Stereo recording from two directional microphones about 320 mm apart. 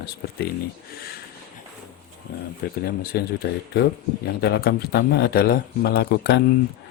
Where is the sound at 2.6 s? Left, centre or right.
Left.